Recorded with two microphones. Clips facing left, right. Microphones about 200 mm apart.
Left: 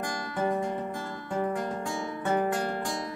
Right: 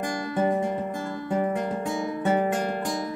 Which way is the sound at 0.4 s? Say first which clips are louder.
Right 4 dB; 20° right (ahead or behind).